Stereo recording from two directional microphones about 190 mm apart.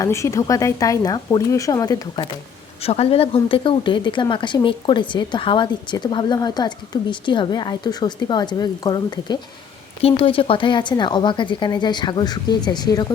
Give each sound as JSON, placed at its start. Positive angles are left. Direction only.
{"t": 0.0, "sound": "a woman's voice", "side_deg": 15}